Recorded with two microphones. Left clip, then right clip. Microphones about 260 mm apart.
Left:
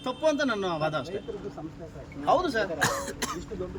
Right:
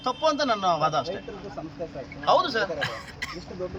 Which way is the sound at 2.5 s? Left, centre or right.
Left.